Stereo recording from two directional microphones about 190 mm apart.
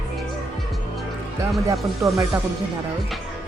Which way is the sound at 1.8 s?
Centre (ahead or behind).